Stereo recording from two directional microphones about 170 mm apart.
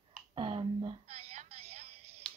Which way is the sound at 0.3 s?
30° right (ahead or behind).